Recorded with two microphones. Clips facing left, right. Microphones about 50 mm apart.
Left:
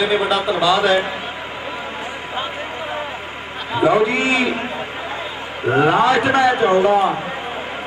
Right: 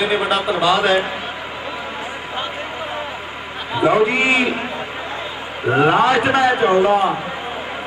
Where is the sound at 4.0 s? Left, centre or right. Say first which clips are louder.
Right 1 dB; right.